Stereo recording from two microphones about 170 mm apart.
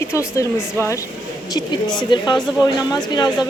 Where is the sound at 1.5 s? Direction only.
25° left (ahead or behind).